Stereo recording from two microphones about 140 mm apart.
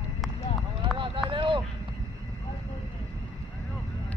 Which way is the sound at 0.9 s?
35° right (ahead or behind).